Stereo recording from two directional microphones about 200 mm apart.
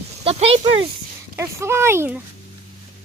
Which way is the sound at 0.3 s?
30° right (ahead or behind).